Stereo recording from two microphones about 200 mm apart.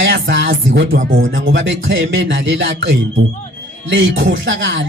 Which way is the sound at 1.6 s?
70° right (ahead or behind).